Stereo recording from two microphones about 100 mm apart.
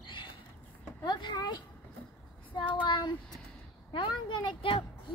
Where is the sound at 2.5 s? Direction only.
50° left (ahead or behind).